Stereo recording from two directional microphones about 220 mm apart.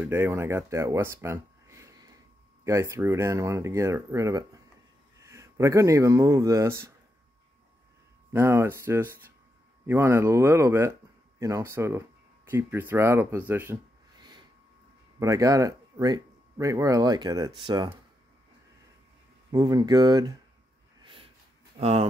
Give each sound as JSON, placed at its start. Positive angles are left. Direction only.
{"t": 0.0, "sound": "speech", "side_deg": -10}
{"t": 8.3, "sound": "speech", "side_deg": -10}
{"t": 15.1, "sound": "speech", "side_deg": -15}
{"t": 19.5, "sound": "speech", "side_deg": -15}
{"t": 21.0, "sound": "a sound", "side_deg": -25}
{"t": 21.7, "sound": "speech", "side_deg": -30}